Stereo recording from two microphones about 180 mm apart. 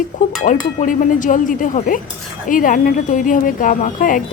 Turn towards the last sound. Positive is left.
turn(degrees=50)  # may be behind; listen again after turning